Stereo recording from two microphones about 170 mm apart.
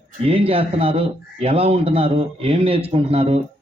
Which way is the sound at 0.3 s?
35° right (ahead or behind).